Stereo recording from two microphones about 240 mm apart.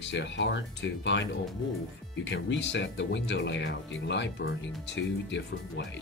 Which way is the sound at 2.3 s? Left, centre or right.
Left.